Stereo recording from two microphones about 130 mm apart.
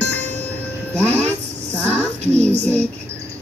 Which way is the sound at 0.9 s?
10° left (ahead or behind).